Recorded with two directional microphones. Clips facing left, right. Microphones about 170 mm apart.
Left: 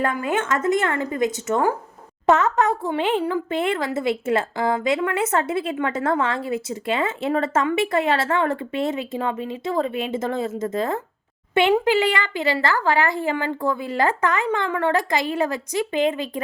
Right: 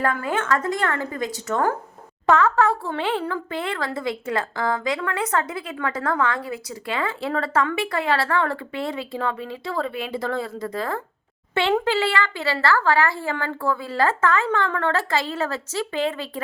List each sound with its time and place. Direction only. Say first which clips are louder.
0.0 s speech: left 1 dB; 20° left (ahead or behind)